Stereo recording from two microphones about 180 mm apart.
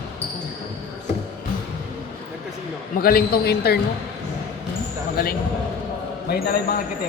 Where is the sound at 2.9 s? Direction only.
55° left (ahead or behind).